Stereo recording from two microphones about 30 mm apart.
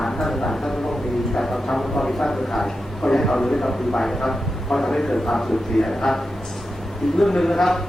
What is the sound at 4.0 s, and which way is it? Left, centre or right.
A man's voice, centre.